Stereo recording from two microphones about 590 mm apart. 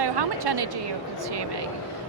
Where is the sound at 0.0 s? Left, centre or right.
Right.